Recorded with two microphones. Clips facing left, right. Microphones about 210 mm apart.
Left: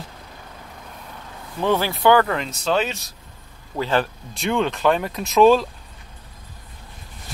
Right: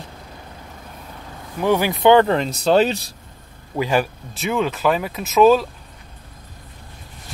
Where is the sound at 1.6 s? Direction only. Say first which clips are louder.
Right 3 dB; 15° right (ahead or behind); by 3.2 s 35° right (ahead or behind).